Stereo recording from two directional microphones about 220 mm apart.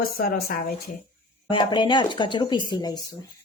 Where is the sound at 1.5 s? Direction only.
20° left (ahead or behind).